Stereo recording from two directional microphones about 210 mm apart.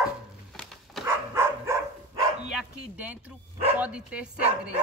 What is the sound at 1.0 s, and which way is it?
Dog, 10° right (ahead or behind).